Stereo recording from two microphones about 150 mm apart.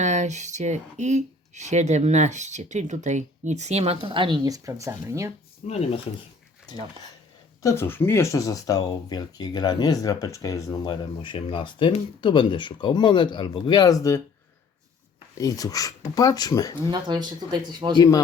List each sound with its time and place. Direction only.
0.0 s speech: 50° right (ahead or behind); by 5.3 s 20° right (ahead or behind)
5.6 s speech: 45° left (ahead or behind)
7.6 s speech: 20° left (ahead or behind)
15.4 s speech: 25° left (ahead or behind)
16.9 s speech: 30° right (ahead or behind)